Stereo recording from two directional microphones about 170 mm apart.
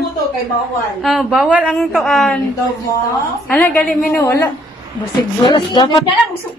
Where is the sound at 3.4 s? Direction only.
10° left (ahead or behind).